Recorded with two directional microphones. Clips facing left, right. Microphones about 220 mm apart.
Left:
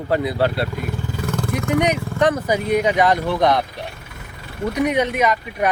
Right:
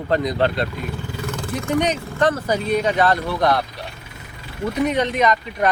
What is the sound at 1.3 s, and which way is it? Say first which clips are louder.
Vehicle: left 3 dB; 60° left (ahead or behind).